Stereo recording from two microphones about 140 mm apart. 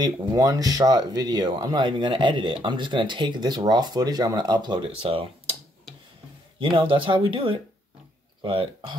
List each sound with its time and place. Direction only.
0.0 s speech: 30° right (ahead or behind)
6.6 s speech: 40° right (ahead or behind)